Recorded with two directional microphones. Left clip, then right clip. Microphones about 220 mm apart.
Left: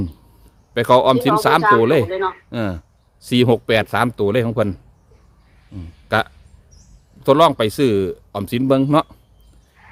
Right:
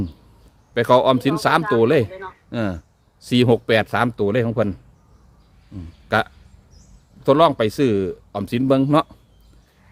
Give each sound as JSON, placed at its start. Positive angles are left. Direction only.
{"t": 0.7, "sound": "speech", "side_deg": 15}
{"t": 2.0, "sound": "speech", "side_deg": 50}
{"t": 2.5, "sound": "speech", "side_deg": 15}
{"t": 6.1, "sound": "speech", "side_deg": 15}